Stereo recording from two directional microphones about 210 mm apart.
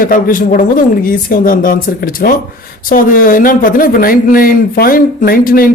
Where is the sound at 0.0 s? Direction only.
40° left (ahead or behind).